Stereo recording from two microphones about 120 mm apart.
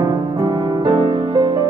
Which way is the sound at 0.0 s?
40° right (ahead or behind).